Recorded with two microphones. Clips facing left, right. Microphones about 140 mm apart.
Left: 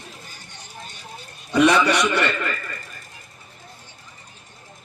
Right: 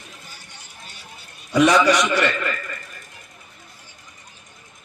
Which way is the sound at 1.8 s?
60° left (ahead or behind).